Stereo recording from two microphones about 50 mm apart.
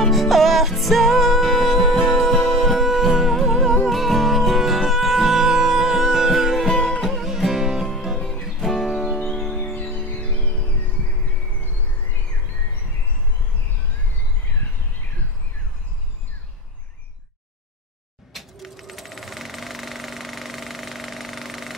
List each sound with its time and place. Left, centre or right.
0.1 s music: centre
6.7 s music: centre
7.0 s music: centre
8.5 s music: centre
8.8 s music: centre
9.8 s music: left
18.3 s sewing machine: centre